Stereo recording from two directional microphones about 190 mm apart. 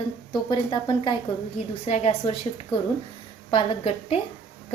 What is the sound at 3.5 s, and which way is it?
Speech, 30° left (ahead or behind).